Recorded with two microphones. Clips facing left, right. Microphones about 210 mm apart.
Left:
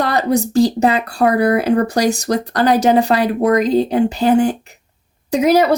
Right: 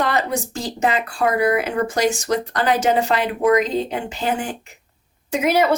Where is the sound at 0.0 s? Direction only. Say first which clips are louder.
Left 5 dB; 35° left (ahead or behind).